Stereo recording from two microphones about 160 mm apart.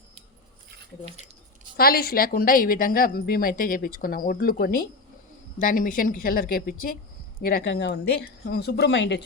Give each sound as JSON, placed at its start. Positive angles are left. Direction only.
{"t": 1.7, "sound": "a woman's voice", "side_deg": 70}
{"t": 7.4, "sound": "speech", "side_deg": 80}